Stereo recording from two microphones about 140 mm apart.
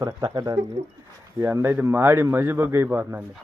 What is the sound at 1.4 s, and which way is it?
A man's voice, 15° right (ahead or behind).